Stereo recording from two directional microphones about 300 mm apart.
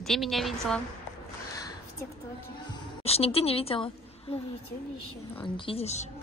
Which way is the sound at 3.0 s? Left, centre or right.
Centre.